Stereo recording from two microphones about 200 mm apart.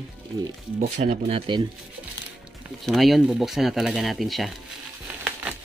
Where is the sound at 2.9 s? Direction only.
Centre (ahead or behind).